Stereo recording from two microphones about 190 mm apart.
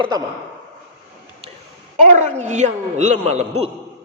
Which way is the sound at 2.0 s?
40° right (ahead or behind).